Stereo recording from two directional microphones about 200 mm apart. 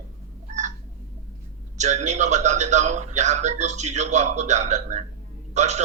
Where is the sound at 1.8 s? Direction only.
35° right (ahead or behind).